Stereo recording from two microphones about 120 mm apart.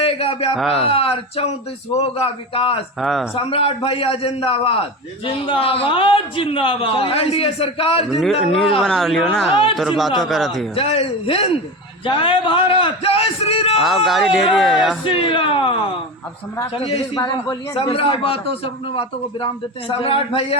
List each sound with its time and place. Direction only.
0.0 s a sound: 50° left (ahead or behind)
0.5 s speech: centre (ahead or behind)
0.8 s a man's voice: 55° left (ahead or behind)
3.0 s speech: centre (ahead or behind)
3.3 s a man's voice: 50° left (ahead or behind)
8.2 s speech: centre (ahead or behind)
10.8 s a man's voice: 50° left (ahead or behind)
13.8 s speech: centre (ahead or behind)
15.0 s a man's voice: 45° left (ahead or behind)
16.7 s a man's voice: 55° left (ahead or behind)